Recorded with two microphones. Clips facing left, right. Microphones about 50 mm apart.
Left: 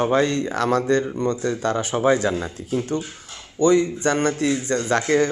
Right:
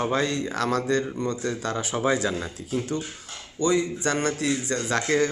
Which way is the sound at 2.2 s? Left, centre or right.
Left.